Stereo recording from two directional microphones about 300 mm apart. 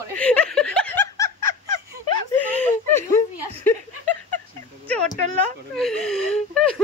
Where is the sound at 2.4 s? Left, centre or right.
Centre.